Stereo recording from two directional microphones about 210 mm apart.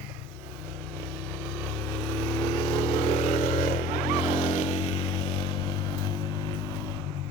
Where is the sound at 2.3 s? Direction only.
20° left (ahead or behind).